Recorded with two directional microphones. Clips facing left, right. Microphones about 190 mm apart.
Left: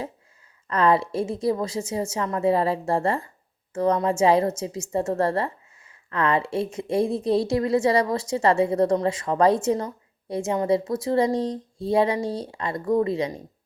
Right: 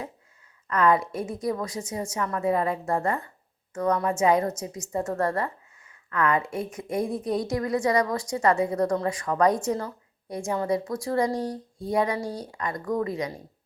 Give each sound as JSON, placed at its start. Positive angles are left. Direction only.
{"t": 0.7, "sound": "a woman's voice", "side_deg": 30}